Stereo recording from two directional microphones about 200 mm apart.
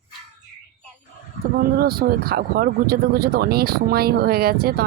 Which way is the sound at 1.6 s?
50° right (ahead or behind).